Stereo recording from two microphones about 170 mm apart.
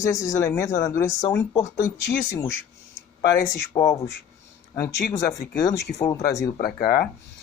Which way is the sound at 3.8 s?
20° left (ahead or behind).